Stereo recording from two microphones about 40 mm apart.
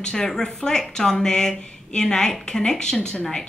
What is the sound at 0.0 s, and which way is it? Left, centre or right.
A woman's voice, centre.